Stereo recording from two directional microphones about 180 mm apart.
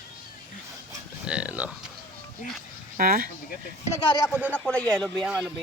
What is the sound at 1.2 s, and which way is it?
Speech, 5° right (ahead or behind).